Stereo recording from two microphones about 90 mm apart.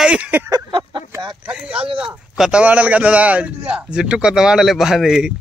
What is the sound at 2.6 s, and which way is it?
A man's voice, 15° right (ahead or behind).